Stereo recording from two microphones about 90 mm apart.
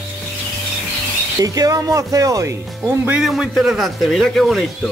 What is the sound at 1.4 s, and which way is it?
Speech, 40° right (ahead or behind).